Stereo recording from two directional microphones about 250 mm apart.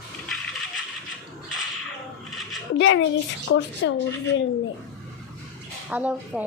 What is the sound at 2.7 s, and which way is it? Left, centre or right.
Speech, left.